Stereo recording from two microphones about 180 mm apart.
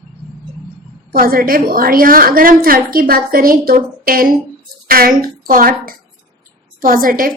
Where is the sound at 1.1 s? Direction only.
55° right (ahead or behind).